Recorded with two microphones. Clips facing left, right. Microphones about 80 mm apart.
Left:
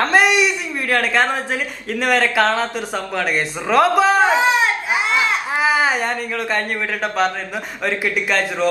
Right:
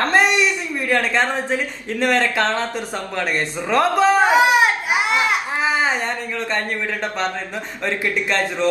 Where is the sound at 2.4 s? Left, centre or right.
Centre.